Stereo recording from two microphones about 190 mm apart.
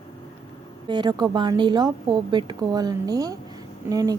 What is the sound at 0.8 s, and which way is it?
A woman's voice, 20° right (ahead or behind).